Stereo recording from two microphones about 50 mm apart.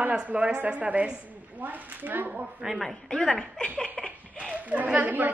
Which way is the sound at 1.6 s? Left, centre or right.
Right.